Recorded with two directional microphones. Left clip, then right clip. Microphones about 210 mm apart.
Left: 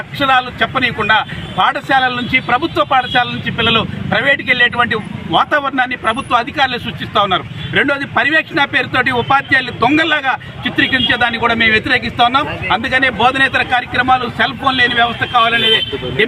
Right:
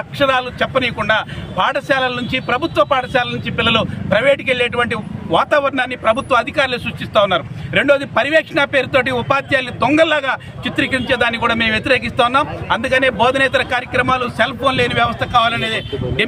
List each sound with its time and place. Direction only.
0.2 s speech: 25° right (ahead or behind)